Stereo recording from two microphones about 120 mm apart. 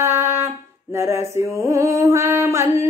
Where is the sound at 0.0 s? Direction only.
20° right (ahead or behind).